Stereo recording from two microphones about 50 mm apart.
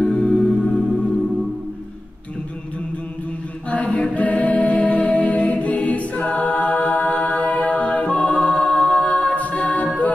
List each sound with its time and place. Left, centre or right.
0.0 s music: centre
3.7 s a capella: left
8.7 s music: centre